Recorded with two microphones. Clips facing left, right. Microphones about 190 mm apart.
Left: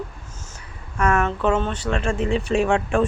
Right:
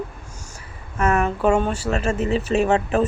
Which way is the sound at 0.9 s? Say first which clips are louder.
Right 1 dB; 5° right (ahead or behind).